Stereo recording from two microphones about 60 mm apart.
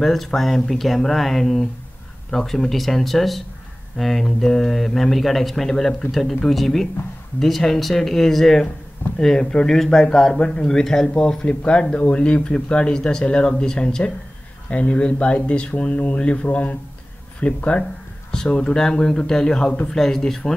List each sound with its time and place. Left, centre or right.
0.0 s speech: centre